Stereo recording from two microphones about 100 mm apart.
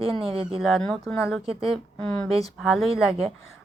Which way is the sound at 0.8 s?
10° left (ahead or behind).